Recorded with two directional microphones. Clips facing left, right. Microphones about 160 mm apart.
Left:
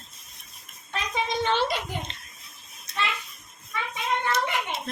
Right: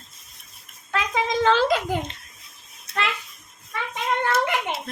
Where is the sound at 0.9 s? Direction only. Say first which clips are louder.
Right 4 dB; 90° right.